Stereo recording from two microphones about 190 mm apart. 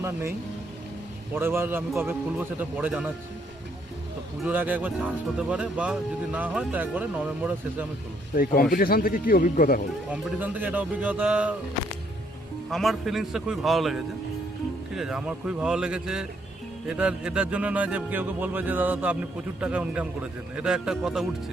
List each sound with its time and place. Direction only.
0.0 s speech: 15° right (ahead or behind)
4.4 s speech: 10° right (ahead or behind)
8.4 s speech: 50° left (ahead or behind)
10.1 s speech: 10° right (ahead or behind)
12.7 s a man's voice: centre (ahead or behind)